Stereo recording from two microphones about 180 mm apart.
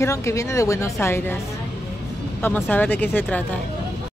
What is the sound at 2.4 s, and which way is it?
A woman's voice, 10° left (ahead or behind).